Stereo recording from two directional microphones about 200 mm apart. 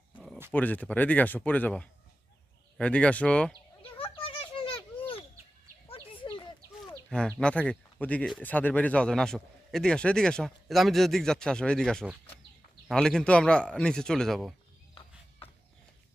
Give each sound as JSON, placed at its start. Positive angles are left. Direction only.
{"t": 0.5, "sound": "speech", "side_deg": 10}
{"t": 4.1, "sound": "a sound", "side_deg": 25}
{"t": 7.1, "sound": "speech", "side_deg": 5}